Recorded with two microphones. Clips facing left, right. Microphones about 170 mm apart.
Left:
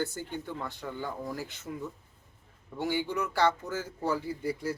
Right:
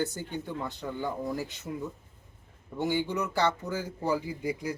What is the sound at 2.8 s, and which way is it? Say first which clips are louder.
Speech: right 2 dB; 15° right (ahead or behind).